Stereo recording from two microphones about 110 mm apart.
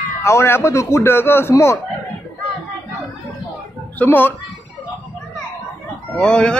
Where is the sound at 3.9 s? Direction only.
15° left (ahead or behind).